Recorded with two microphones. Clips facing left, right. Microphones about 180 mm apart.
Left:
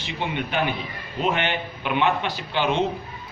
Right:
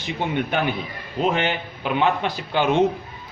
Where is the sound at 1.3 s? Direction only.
35° right (ahead or behind).